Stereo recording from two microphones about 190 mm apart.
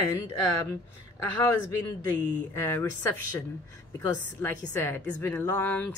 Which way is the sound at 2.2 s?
15° left (ahead or behind).